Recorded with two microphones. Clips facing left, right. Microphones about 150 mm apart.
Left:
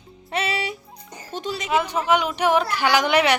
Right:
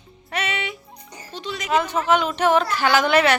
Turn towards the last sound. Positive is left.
turn(degrees=15)  # may be behind; listen again after turning